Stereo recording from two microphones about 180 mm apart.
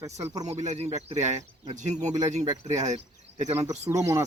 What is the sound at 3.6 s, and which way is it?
Speech, 15° right (ahead or behind).